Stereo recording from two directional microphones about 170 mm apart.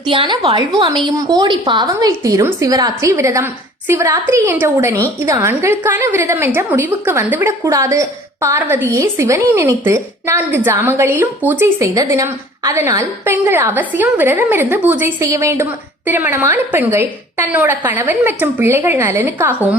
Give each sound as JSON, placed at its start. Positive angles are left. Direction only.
{"t": 0.0, "sound": "a woman's voice", "side_deg": -30}